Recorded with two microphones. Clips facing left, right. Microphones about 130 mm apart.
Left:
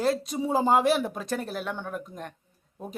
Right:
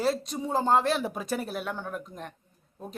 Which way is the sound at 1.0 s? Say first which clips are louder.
Even; 5° right (ahead or behind).